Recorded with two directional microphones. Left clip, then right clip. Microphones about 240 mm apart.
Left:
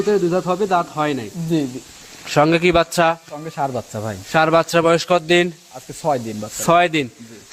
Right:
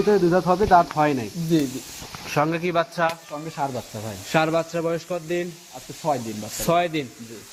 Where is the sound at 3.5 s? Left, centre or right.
Left.